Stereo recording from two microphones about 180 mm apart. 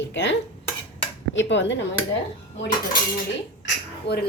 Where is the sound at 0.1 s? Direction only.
75° left (ahead or behind).